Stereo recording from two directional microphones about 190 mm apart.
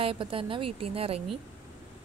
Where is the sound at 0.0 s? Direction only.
30° right (ahead or behind).